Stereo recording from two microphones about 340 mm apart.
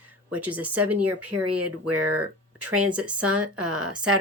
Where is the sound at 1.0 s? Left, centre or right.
Right.